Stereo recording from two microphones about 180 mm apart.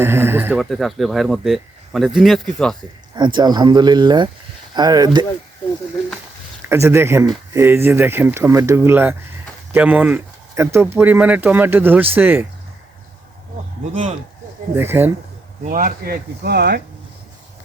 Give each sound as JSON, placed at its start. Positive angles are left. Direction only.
{"t": 0.0, "sound": "speech", "side_deg": -15}
{"t": 0.6, "sound": "speech", "side_deg": 0}
{"t": 3.2, "sound": "speech", "side_deg": -25}
{"t": 6.7, "sound": "speech", "side_deg": -15}
{"t": 14.8, "sound": "speech", "side_deg": -10}
{"t": 15.6, "sound": "speech", "side_deg": -50}